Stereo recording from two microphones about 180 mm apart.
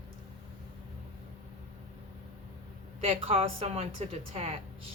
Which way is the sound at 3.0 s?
30° right (ahead or behind).